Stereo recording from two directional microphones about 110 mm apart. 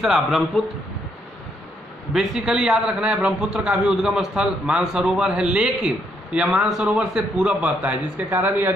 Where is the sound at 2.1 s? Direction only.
5° right (ahead or behind).